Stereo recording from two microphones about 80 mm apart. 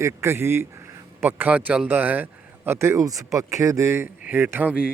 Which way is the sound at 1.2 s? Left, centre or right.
Right.